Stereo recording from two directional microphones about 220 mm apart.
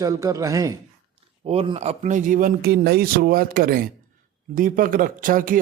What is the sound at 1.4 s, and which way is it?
Speech, 25° right (ahead or behind).